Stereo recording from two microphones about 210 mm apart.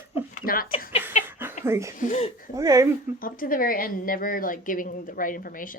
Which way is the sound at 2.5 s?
15° right (ahead or behind).